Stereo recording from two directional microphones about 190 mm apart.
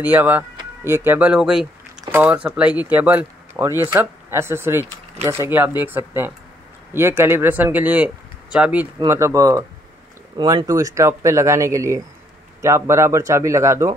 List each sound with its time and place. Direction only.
0.0 s speech: 10° right (ahead or behind)